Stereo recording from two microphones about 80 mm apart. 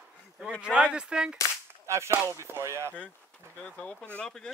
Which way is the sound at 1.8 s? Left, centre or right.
Right.